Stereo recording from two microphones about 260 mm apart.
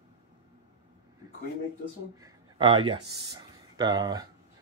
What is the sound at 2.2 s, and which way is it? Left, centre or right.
A man's voice, centre.